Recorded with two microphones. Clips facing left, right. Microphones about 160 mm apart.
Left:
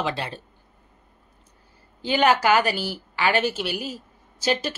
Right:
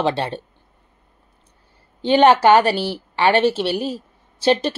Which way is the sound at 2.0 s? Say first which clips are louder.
Right 7 dB; 30° right (ahead or behind).